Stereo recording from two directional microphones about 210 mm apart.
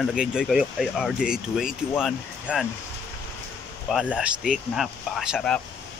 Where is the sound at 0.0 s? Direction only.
5° right (ahead or behind).